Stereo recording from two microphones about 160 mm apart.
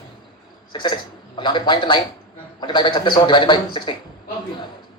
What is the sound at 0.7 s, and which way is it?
A man's voice, 30° left (ahead or behind).